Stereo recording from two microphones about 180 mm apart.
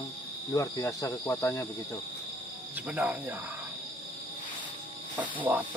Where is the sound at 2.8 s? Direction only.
10° right (ahead or behind).